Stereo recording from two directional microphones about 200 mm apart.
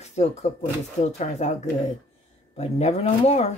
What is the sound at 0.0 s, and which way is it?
Speech, 35° left (ahead or behind).